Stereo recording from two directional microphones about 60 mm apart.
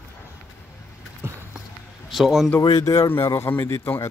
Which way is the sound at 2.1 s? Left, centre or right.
Centre.